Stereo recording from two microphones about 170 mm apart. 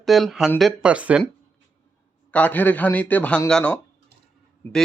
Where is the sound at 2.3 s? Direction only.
10° left (ahead or behind).